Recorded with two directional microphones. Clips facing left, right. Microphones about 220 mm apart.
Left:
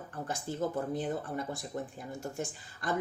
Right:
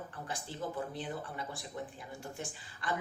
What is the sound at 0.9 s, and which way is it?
Speech, 45° left (ahead or behind).